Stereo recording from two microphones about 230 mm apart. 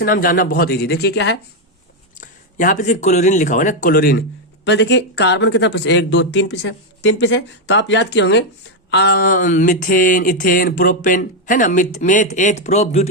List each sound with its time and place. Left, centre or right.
0.0 s speech: left
2.1 s speech: left